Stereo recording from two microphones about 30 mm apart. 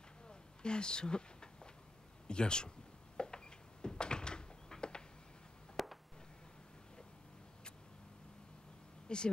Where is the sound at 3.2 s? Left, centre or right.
Left.